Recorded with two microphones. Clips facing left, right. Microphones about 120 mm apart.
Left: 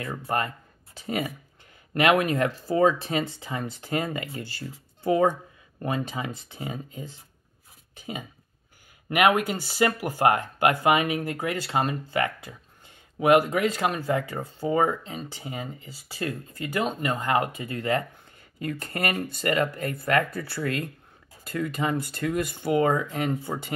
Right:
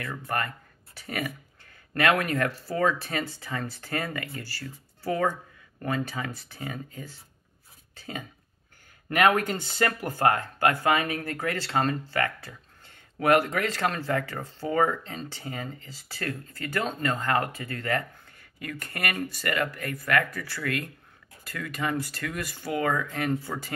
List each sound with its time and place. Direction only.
0.0 s speech: 20° left (ahead or behind)
7.9 s a sound: 15° left (ahead or behind)
9.1 s speech: 15° left (ahead or behind)